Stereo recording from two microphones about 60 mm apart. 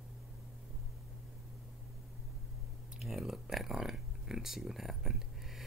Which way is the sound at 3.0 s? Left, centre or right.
Centre.